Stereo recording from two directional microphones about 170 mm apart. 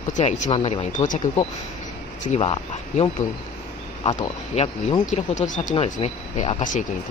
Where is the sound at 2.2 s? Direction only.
40° left (ahead or behind).